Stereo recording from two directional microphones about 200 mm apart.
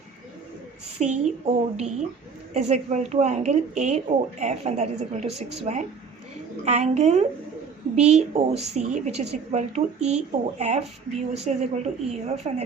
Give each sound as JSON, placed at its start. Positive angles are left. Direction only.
{"t": 0.9, "sound": "speech", "side_deg": -35}